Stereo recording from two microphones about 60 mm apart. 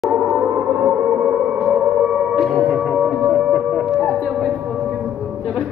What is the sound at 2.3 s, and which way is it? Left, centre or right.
Music, centre.